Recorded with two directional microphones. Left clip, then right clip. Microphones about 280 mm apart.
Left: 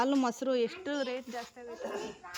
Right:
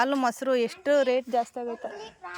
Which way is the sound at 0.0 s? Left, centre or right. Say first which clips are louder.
Right 5 dB; centre.